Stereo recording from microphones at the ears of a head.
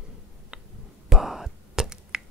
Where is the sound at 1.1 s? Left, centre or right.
Centre.